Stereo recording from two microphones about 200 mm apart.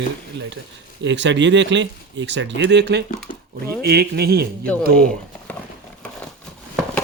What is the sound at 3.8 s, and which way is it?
Speech, 50° right (ahead or behind).